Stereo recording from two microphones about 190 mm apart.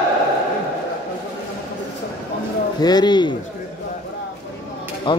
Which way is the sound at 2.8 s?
20° left (ahead or behind).